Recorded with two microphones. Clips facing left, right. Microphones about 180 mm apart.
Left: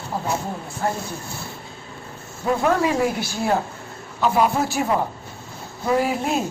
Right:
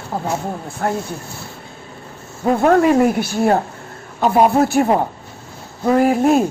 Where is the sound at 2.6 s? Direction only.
55° right (ahead or behind).